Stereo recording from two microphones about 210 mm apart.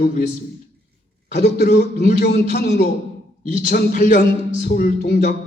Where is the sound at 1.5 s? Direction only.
50° left (ahead or behind).